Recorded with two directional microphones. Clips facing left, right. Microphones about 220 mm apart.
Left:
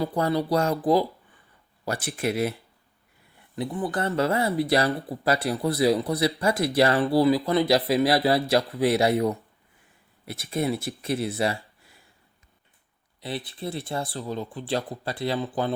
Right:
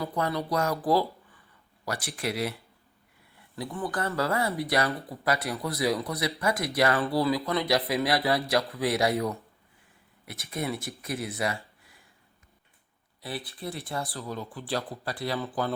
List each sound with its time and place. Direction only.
0.0 s speech: 30° left (ahead or behind)
13.2 s speech: 25° left (ahead or behind)